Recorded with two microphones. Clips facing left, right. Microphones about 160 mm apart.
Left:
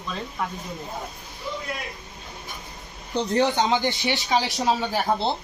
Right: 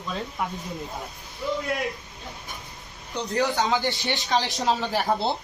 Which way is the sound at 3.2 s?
25° left (ahead or behind).